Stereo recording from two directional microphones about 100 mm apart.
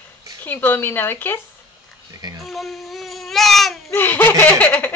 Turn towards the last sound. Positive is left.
turn(degrees=20)  # may be behind; listen again after turning